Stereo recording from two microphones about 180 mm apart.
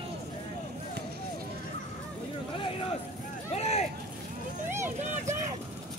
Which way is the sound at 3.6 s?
35° left (ahead or behind).